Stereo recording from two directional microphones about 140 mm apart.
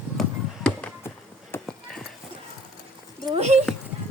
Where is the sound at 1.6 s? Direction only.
Centre (ahead or behind).